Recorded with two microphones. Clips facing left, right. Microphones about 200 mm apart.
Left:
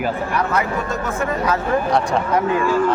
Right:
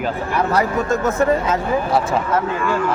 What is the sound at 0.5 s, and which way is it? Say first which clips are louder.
Speech: right 3 dB; 40° right (ahead or behind).